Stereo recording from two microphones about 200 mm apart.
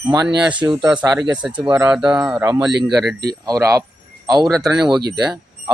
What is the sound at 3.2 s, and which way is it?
Speech, 15° right (ahead or behind).